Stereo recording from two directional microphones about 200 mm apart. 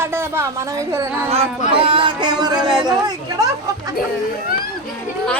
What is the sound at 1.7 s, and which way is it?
Music, 25° right (ahead or behind).